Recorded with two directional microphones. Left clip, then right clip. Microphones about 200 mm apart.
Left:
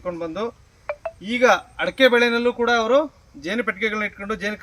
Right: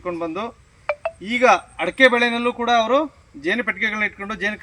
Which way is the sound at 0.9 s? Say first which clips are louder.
Right 5 dB; 65° right (ahead or behind).